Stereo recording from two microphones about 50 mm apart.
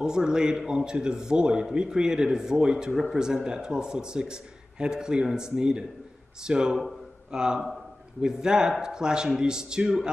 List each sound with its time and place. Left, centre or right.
0.0 s a man's voice: centre